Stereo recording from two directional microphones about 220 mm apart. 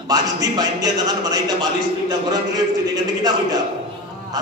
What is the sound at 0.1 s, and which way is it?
A man's voice, 15° right (ahead or behind).